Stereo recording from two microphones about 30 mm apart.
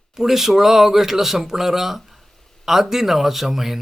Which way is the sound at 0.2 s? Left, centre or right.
Centre.